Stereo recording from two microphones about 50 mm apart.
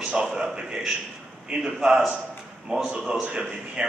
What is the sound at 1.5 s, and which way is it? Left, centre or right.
Speech, right.